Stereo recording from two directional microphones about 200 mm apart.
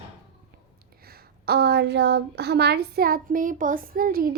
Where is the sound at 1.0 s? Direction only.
50° right (ahead or behind).